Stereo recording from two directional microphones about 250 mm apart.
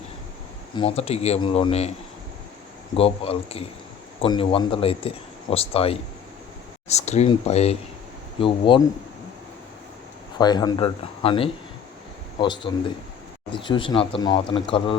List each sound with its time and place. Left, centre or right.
0.8 s speech: left
10.3 s speech: centre